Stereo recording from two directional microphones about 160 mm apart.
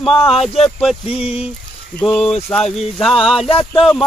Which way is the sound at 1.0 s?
40° left (ahead or behind).